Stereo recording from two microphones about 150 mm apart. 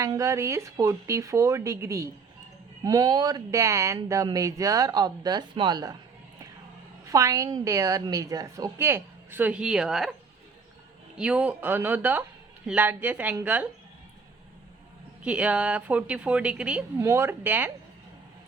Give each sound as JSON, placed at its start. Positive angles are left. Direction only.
{"t": 0.0, "sound": "speech", "side_deg": -20}
{"t": 7.1, "sound": "speech", "side_deg": -20}
{"t": 11.2, "sound": "speech", "side_deg": -10}
{"t": 15.2, "sound": "speech", "side_deg": -10}